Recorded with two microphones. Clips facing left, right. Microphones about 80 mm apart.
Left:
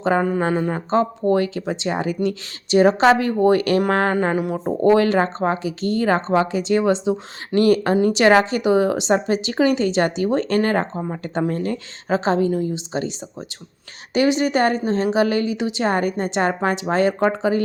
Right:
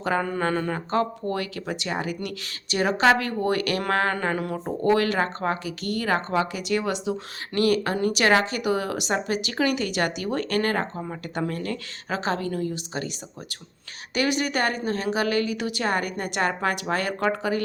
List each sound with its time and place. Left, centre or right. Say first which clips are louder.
0.0 s speech: left 6 dB; left